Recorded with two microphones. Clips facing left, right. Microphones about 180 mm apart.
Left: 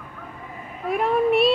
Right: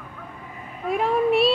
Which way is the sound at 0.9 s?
Centre (ahead or behind).